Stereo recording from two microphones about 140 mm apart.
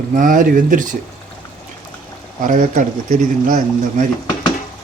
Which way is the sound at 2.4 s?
70° right (ahead or behind).